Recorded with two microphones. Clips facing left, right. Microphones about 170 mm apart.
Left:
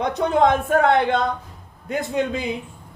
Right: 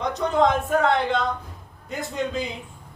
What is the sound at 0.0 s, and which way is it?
Speech, 60° left (ahead or behind).